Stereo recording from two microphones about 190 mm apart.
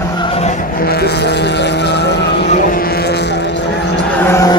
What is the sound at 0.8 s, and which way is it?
Vehicle, 55° left (ahead or behind).